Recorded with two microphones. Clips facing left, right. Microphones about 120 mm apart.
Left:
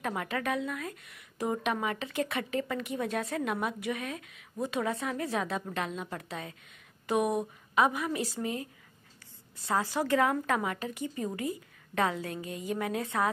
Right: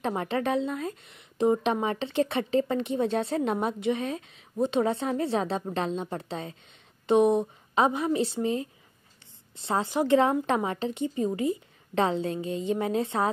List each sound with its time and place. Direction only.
0.0 s a woman's voice: 30° right (ahead or behind)